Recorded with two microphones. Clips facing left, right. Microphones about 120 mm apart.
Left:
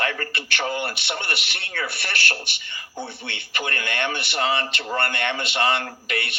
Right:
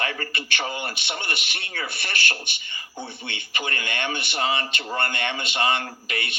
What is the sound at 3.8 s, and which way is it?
Speech, 55° left (ahead or behind).